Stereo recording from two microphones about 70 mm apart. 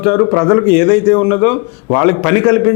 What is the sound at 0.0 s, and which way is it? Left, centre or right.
A man's voice, left.